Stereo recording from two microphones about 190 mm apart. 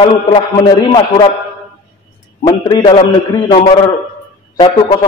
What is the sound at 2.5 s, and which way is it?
A man's voice, 20° left (ahead or behind).